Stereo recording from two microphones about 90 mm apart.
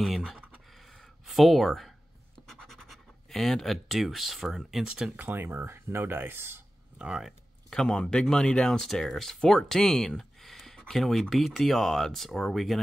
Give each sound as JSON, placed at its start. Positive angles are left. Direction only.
{"t": 0.0, "sound": "speech", "side_deg": 0}
{"t": 0.7, "sound": "a sound", "side_deg": 0}
{"t": 2.4, "sound": "scratch", "side_deg": 5}
{"t": 4.8, "sound": "speech", "side_deg": -10}
{"t": 5.2, "sound": "speech", "side_deg": -25}
{"t": 7.0, "sound": "speech", "side_deg": -5}
{"t": 7.7, "sound": "speech", "side_deg": 5}